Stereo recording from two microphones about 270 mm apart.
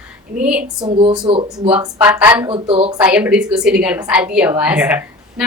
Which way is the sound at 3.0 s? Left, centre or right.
Centre.